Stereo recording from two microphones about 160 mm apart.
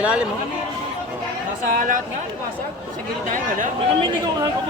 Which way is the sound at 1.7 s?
60° right (ahead or behind).